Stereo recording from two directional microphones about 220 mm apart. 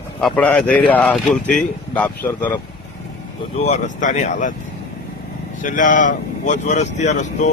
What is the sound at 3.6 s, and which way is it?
Speech, 30° left (ahead or behind).